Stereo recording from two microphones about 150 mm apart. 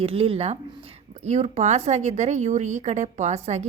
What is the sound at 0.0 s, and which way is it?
A woman's voice, 40° right (ahead or behind).